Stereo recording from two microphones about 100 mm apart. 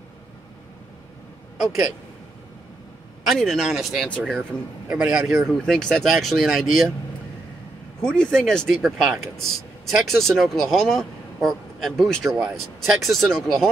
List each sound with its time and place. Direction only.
1.6 s speech: 5° right (ahead or behind)
3.3 s a man's voice: centre (ahead or behind)
5.7 s speech: 5° left (ahead or behind)
8.0 s speech: 10° left (ahead or behind)